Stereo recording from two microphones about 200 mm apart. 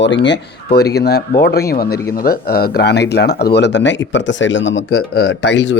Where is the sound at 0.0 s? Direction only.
60° left (ahead or behind); by 5.0 s 80° left.